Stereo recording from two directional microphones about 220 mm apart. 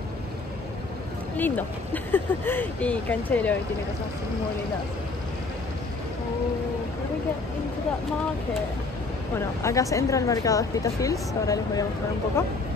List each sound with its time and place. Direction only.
2.1 s a woman's voice: 10° left (ahead or behind)
9.6 s a woman's voice: 15° left (ahead or behind)